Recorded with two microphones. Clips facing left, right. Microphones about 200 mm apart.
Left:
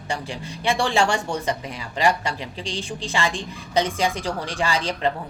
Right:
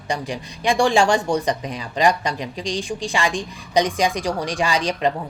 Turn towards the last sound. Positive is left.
turn(degrees=-15)  # may be behind; listen again after turning